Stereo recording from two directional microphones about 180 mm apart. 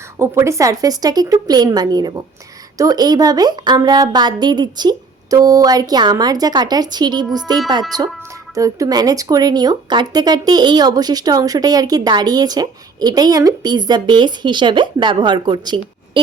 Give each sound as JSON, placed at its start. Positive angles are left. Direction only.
{"t": 0.2, "sound": "speech", "side_deg": -15}